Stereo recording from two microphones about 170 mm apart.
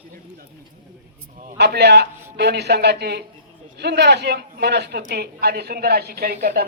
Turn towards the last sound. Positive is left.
turn(degrees=-65)  # may be behind; listen again after turning